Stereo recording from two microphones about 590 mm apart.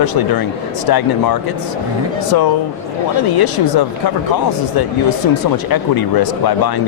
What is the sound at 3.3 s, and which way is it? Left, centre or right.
Speech, left.